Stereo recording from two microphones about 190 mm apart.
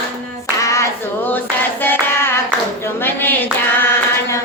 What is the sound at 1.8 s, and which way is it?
Clapping, 10° left (ahead or behind).